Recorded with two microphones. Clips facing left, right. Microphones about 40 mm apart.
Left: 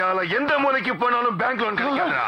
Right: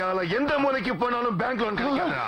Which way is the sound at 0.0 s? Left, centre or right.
Left.